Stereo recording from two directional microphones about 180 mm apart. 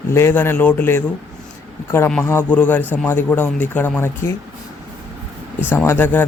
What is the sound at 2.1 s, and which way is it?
A man's voice, 10° left (ahead or behind).